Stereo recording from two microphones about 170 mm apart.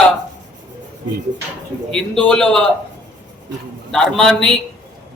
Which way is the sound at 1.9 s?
5° left (ahead or behind).